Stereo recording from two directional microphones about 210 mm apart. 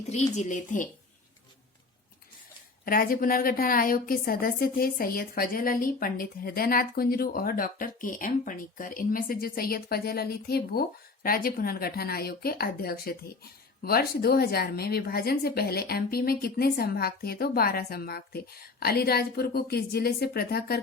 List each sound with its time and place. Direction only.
0.1 s speech: 30° left (ahead or behind)
2.8 s a woman's voice: 45° left (ahead or behind)